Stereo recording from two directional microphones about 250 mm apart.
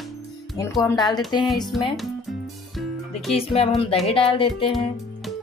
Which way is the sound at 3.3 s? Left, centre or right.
Left.